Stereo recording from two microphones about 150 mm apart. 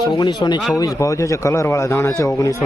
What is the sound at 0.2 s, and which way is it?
A man's voice, 30° left (ahead or behind).